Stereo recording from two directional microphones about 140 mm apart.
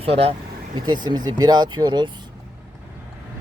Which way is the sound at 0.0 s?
45° right (ahead or behind).